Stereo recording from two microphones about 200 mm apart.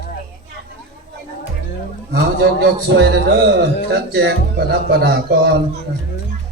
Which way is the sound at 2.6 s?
55° right (ahead or behind).